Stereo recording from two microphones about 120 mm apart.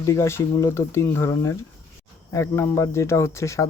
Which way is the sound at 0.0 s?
25° left (ahead or behind).